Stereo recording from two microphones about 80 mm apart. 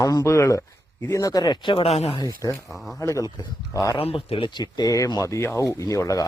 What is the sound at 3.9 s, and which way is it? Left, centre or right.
Speech, left.